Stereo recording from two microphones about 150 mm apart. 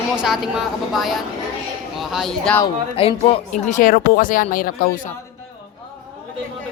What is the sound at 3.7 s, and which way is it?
Speech, 65° left (ahead or behind).